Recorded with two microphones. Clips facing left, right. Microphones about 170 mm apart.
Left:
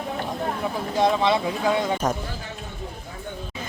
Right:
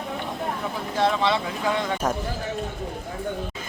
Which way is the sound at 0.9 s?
15° left (ahead or behind).